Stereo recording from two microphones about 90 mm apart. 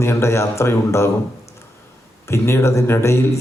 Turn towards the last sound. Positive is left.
turn(degrees=30)  # may be behind; listen again after turning